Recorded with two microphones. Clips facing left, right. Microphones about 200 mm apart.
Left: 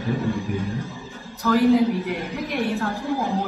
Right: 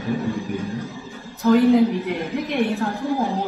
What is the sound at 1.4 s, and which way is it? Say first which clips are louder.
A woman's voice: right 2 dB; 20° right (ahead or behind).